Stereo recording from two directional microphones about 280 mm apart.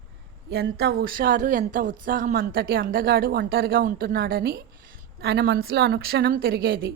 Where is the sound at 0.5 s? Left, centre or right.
Right.